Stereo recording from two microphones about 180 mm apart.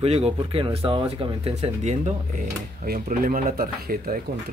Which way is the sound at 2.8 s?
50° right (ahead or behind).